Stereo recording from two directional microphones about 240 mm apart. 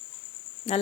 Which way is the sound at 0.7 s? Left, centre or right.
Left.